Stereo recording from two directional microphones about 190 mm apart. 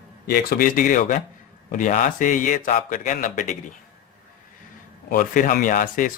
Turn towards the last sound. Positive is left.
turn(degrees=45)  # may be behind; listen again after turning